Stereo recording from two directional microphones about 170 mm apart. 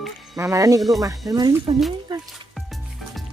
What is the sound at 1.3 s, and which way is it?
Speech, 20° right (ahead or behind).